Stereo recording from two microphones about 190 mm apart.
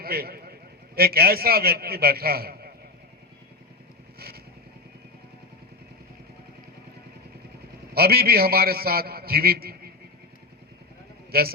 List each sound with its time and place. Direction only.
0.0 s a man's voice: 55° right (ahead or behind)
7.9 s a man's voice: 55° right (ahead or behind)
11.3 s a man's voice: 55° right (ahead or behind)